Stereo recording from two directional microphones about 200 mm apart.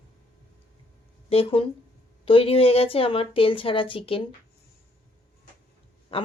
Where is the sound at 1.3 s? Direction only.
30° left (ahead or behind).